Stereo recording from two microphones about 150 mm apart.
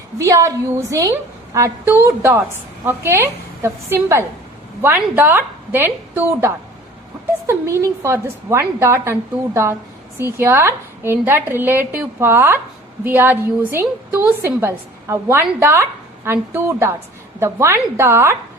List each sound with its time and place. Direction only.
0.2 s a woman's voice: 20° right (ahead or behind)
10.2 s a woman's voice: 15° right (ahead or behind)